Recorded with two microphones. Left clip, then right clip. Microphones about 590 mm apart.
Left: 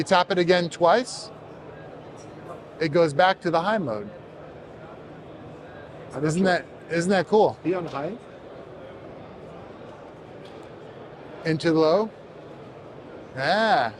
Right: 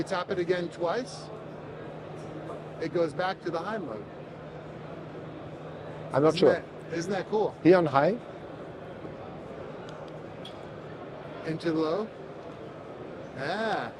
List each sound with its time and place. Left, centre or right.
0.0 s speech: left
2.7 s speech: left
6.2 s speech: left
7.7 s speech: right
11.4 s speech: left
13.4 s speech: left